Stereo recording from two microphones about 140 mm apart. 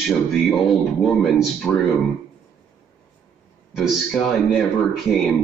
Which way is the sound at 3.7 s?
5° right (ahead or behind).